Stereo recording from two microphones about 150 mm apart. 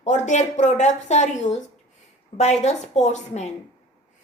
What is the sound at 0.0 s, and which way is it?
Speech, 50° left (ahead or behind).